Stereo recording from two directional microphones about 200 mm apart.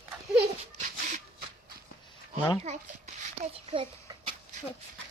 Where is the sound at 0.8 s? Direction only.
40° right (ahead or behind).